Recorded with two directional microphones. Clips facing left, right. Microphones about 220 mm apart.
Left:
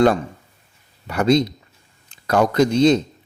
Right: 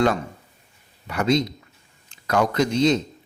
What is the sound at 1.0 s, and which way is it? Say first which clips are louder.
A man's voice: left 4 dB; 35° left (ahead or behind).